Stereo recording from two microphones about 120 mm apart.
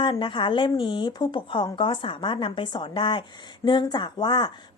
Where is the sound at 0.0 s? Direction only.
45° left (ahead or behind).